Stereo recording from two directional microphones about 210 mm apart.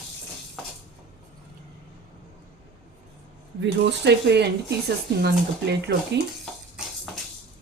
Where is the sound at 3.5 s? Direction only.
55° right (ahead or behind).